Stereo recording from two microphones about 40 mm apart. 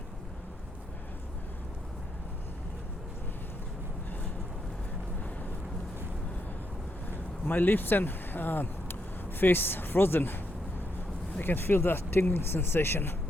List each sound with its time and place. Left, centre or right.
7.1 s speech: left